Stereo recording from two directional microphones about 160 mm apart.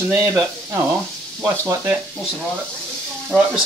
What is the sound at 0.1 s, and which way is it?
Speech, 15° right (ahead or behind).